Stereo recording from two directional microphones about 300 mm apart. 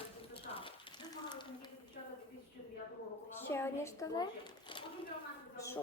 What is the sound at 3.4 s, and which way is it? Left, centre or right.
Speech, centre.